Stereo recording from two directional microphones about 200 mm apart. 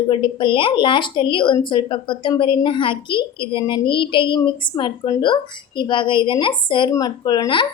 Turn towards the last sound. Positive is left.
turn(degrees=25)  # may be behind; listen again after turning